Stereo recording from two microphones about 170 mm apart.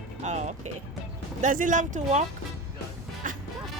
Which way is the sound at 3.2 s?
50° right (ahead or behind).